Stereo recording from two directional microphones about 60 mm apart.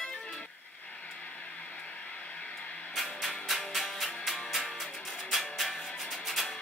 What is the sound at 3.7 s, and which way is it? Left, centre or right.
Music, centre.